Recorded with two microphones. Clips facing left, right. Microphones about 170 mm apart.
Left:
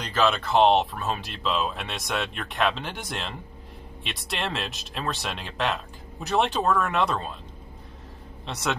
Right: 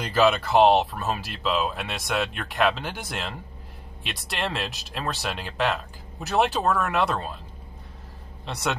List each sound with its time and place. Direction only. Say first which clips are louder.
0.0 s speech: right 3 dB; 10° right (ahead or behind)
8.5 s speech: right 1 dB; centre (ahead or behind)